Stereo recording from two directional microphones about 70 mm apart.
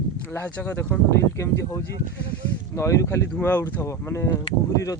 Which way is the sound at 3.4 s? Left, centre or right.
Left.